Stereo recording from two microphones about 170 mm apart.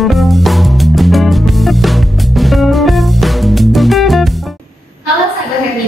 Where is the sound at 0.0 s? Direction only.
Centre (ahead or behind).